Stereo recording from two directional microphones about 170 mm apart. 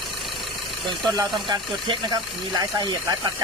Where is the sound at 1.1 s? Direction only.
30° right (ahead or behind).